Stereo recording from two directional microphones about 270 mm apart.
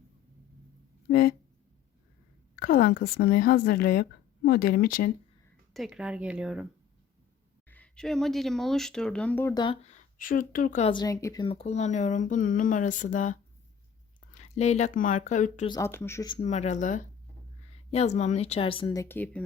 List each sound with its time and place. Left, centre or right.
2.6 s a woman's voice: left
5.7 s speech: centre
7.7 s speech: centre; by 13.3 s left
14.3 s speech: left
15.7 s speech: centre